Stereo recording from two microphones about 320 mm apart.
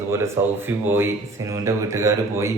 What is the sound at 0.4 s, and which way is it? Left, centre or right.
Speech, centre.